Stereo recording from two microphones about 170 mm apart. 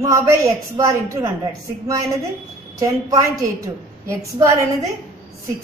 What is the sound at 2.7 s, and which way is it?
A woman's voice, 20° right (ahead or behind).